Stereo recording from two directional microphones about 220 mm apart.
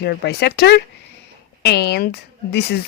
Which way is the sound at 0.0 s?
50° left (ahead or behind).